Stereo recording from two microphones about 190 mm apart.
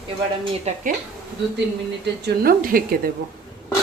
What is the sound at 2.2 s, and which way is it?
Speech, 50° right (ahead or behind).